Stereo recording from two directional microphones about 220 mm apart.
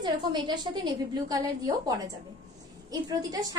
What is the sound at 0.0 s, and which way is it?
A woman's voice, 20° right (ahead or behind).